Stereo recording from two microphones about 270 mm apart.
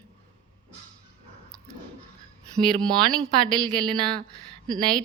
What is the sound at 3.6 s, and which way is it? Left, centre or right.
Speech, centre.